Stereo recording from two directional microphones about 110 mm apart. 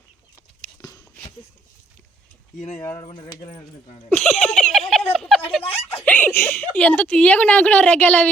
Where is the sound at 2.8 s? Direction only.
20° left (ahead or behind).